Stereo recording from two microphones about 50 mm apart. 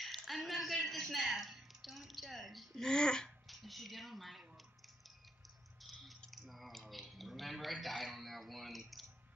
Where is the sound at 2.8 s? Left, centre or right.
Centre.